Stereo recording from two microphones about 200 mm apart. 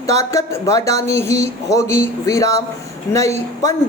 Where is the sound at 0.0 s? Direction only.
15° left (ahead or behind).